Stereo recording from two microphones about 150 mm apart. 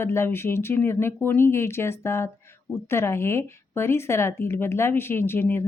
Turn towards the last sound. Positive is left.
turn(degrees=15)  # may be behind; listen again after turning